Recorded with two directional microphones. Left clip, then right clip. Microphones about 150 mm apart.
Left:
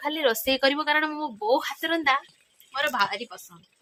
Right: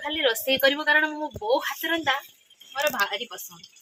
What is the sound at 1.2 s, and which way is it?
Speech, 5° left (ahead or behind).